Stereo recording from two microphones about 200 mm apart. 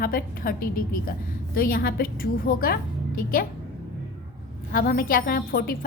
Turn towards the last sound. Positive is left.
turn(degrees=45)  # may be behind; listen again after turning